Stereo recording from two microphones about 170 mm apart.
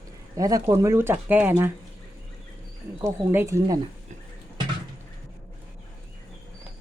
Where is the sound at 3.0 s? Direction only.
15° right (ahead or behind).